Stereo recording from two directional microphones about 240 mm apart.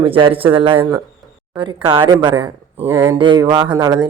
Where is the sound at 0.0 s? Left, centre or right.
Right.